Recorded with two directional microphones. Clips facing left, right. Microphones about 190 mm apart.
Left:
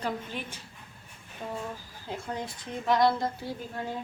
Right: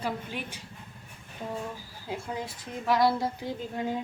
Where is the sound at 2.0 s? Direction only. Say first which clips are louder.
Right 1 dB; 5° right (ahead or behind).